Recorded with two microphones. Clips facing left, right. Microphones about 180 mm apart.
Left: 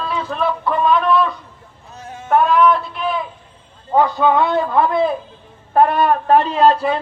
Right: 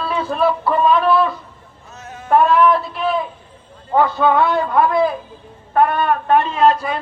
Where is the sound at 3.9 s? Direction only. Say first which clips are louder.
Even; 15° left (ahead or behind).